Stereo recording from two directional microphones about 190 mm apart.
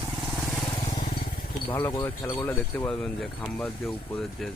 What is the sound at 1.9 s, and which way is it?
Speech, 20° left (ahead or behind).